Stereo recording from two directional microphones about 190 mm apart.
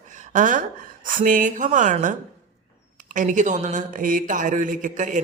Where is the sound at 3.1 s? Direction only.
40° right (ahead or behind).